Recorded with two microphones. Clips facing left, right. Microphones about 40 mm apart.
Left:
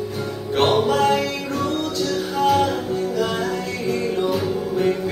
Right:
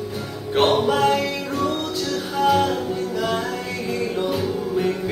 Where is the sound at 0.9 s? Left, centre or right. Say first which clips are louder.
Even; centre.